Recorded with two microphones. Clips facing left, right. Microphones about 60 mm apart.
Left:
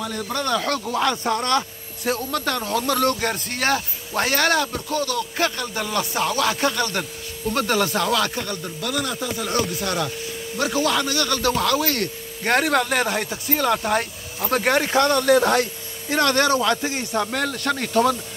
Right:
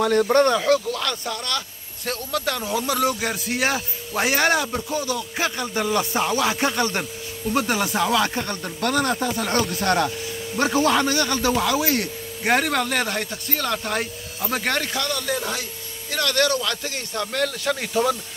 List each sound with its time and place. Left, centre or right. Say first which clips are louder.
0.2 s speech: right 11 dB; right
0.6 s speech: right 5 dB; centre
0.8 s speech: left 5 dB; left
2.0 s a man's voice: left 2 dB; centre; by 8.5 s right
8.5 s speech: right 3 dB; right
10.6 s speech: right 2 dB; right; by 12.5 s centre
12.5 s speech: left 4 dB; centre
14.9 s speech: left 8 dB; left
15.2 s a man's voice: left 10 dB; left
16.1 s speech: left 3 dB; left
17.4 s speech: even; centre